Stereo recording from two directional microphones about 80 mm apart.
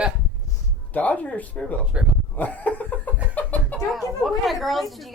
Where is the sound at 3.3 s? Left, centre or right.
Centre.